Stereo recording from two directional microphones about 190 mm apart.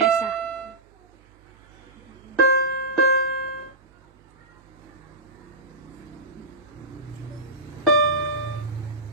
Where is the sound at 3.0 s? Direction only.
55° left (ahead or behind).